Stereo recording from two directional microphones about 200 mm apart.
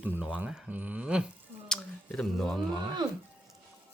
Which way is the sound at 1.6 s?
5° left (ahead or behind).